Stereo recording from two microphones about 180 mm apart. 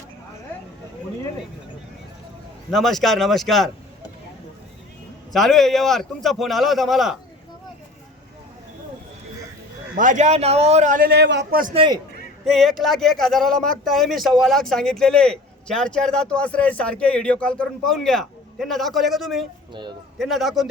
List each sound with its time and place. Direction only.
2.6 s speech: centre (ahead or behind)
5.3 s speech: centre (ahead or behind)
9.9 s a man's voice: 45° right (ahead or behind); by 11.6 s 70° right (ahead or behind)
11.7 s a man's voice: 30° right (ahead or behind)
12.5 s speech: centre (ahead or behind)